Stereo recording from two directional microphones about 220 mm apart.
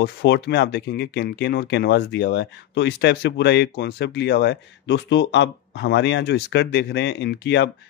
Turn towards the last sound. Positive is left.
turn(degrees=50)  # may be behind; listen again after turning